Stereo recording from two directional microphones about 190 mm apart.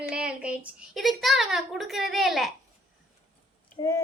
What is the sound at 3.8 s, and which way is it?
Speech, 15° left (ahead or behind).